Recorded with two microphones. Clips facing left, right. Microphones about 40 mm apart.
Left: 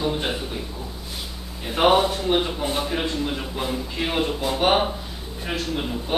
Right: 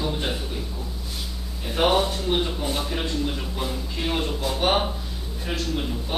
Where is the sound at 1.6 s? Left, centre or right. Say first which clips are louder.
Left 3 dB; centre.